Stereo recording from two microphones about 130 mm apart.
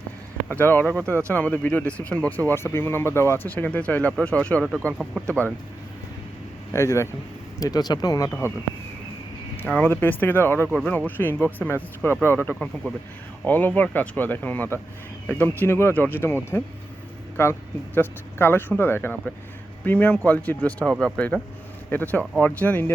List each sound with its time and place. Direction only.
0.4 s speech: 15° left (ahead or behind)
6.7 s speech: 20° left (ahead or behind)
9.6 s speech: 10° left (ahead or behind)